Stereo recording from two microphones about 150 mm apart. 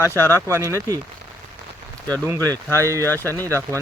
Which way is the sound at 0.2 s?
15° left (ahead or behind).